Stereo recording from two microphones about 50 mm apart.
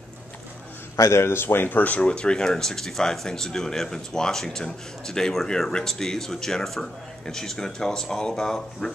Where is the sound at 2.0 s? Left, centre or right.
Centre.